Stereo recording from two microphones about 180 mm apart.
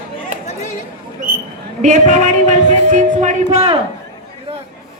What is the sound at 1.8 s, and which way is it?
Speech, 45° right (ahead or behind).